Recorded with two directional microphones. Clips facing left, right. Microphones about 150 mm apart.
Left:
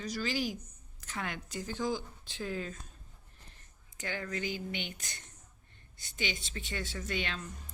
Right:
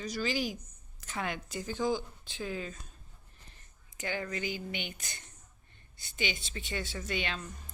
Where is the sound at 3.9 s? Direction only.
15° right (ahead or behind).